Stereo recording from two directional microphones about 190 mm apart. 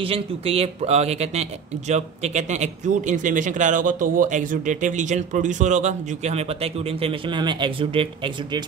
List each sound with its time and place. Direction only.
0.0 s speech: 30° right (ahead or behind)